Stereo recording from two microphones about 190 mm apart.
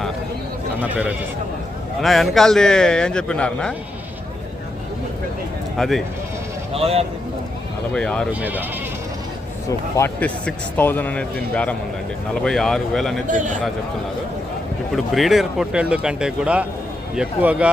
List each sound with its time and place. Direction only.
0.8 s a man's voice: 10° right (ahead or behind)
5.7 s speech: centre (ahead or behind)
6.7 s a man's voice: 30° right (ahead or behind)
7.9 s a man's voice: 5° left (ahead or behind)
8.3 s speech: 10° right (ahead or behind)
9.6 s a man's voice: 15° left (ahead or behind)
13.2 s a man's voice: 40° right (ahead or behind)
14.9 s a man's voice: centre (ahead or behind)